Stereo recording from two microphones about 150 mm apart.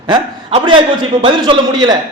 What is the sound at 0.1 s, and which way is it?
A man's voice, 35° right (ahead or behind).